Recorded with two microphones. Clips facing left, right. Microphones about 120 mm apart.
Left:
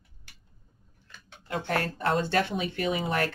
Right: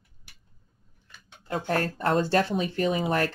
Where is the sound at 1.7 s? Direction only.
40° right (ahead or behind).